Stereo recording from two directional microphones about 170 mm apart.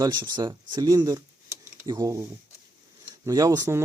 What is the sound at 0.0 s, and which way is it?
Speech, 25° right (ahead or behind).